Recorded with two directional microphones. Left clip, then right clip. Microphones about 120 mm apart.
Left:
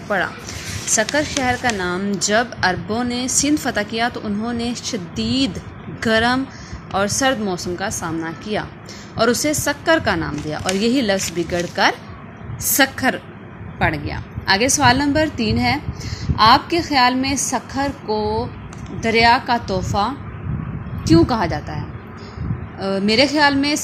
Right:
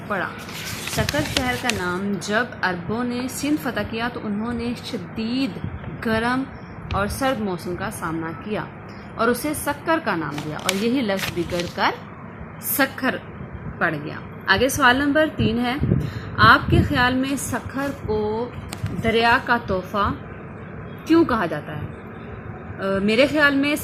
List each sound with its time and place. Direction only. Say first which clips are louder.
1.1 s a woman's voice: left 4 dB; 50° left (ahead or behind); by 20.1 s 25° left (ahead or behind)
21.1 s a woman's voice: left 3 dB; 25° left (ahead or behind)
22.8 s a woman's voice: left 2 dB; 30° left (ahead or behind)